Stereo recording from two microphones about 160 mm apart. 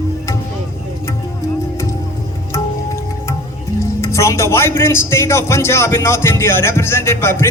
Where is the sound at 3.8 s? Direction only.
20° left (ahead or behind).